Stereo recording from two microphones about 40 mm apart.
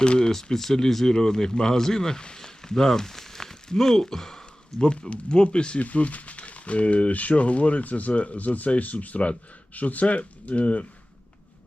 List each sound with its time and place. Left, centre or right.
0.0 s speech: left
0.5 s speech: centre
5.0 s speech: left
5.8 s speech: left